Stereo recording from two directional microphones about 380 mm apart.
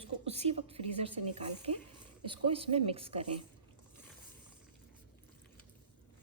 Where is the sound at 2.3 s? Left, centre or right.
Centre.